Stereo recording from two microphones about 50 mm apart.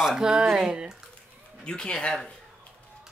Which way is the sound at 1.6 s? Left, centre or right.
Centre.